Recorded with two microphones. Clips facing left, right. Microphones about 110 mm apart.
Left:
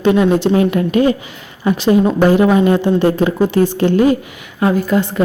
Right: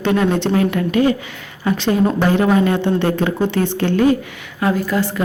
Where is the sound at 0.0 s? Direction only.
15° left (ahead or behind).